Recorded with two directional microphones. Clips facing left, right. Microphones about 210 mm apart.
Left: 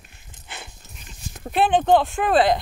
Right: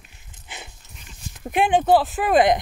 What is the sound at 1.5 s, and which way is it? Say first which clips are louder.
Speech: even; 10° right (ahead or behind).